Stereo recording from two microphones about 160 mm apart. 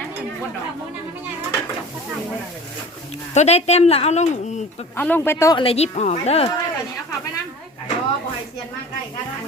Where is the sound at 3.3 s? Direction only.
45° left (ahead or behind).